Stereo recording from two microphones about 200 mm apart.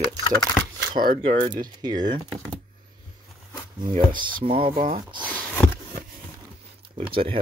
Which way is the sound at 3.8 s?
25° right (ahead or behind).